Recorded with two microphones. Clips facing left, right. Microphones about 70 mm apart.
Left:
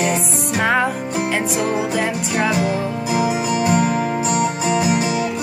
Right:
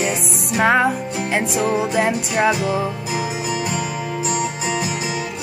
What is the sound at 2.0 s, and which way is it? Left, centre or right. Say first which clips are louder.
Music: right 2 dB; centre.